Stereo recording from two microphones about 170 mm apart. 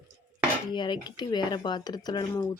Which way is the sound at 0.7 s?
25° left (ahead or behind).